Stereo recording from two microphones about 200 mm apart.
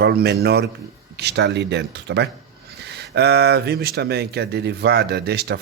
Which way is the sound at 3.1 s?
55° right (ahead or behind).